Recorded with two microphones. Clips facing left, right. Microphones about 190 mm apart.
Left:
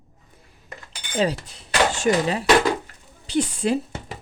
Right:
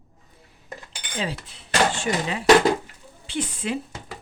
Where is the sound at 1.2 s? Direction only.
40° left (ahead or behind).